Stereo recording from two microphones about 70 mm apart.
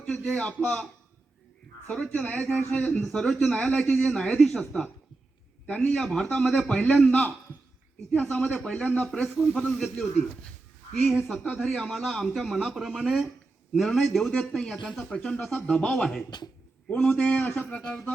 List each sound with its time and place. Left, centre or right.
0.3 s speech: centre
1.9 s speech: centre
5.6 s speech: centre
17.4 s speech: left
17.7 s speech: centre